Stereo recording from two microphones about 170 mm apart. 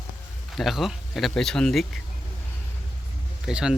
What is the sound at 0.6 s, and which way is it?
Speech, centre (ahead or behind).